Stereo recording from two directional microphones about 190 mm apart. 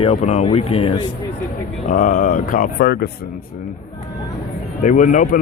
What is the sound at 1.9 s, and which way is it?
A man's voice, 45° left (ahead or behind).